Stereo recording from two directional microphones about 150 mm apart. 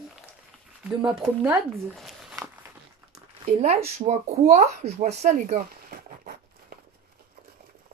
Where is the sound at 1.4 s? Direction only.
10° right (ahead or behind).